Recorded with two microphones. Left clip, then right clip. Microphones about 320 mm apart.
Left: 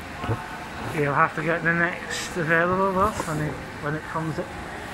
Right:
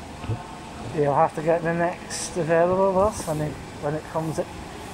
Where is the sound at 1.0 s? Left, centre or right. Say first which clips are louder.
Right 1 dB; right.